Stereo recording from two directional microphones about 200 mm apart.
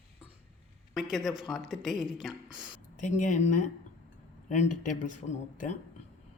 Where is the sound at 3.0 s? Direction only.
40° left (ahead or behind).